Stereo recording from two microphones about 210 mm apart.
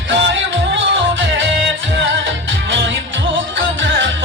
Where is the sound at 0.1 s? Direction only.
60° right (ahead or behind).